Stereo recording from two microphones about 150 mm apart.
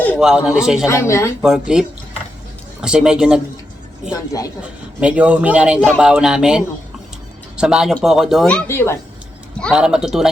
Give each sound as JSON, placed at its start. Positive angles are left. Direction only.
{"t": 0.2, "sound": "a man's voice", "side_deg": -5}
{"t": 0.9, "sound": "speech", "side_deg": 20}
{"t": 1.4, "sound": "a man's voice", "side_deg": -5}
{"t": 2.8, "sound": "a man's voice", "side_deg": -5}
{"t": 4.6, "sound": "a man's voice", "side_deg": -10}
{"t": 8.6, "sound": "a woman's voice", "side_deg": 15}
{"t": 9.6, "sound": "a man's voice", "side_deg": 0}